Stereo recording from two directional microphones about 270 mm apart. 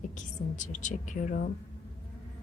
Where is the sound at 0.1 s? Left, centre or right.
Left.